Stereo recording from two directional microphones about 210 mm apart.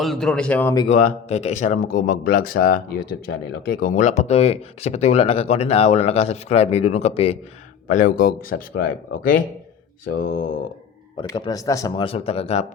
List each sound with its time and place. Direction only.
0.0 s speech: centre (ahead or behind)
0.9 s speech: 35° left (ahead or behind)
7.9 s speech: 40° left (ahead or behind)
11.2 s speech: 20° left (ahead or behind)